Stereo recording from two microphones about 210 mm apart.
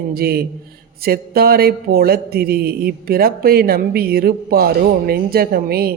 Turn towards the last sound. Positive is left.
turn(degrees=-45)  # may be behind; listen again after turning